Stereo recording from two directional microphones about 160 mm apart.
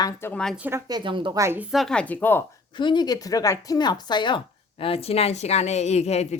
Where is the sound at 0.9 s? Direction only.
30° right (ahead or behind).